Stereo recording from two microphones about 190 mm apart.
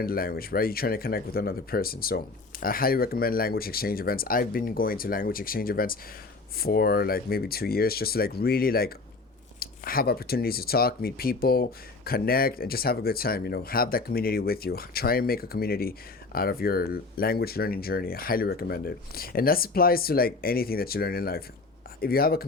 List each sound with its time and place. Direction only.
0.0 s speech: 50° left (ahead or behind)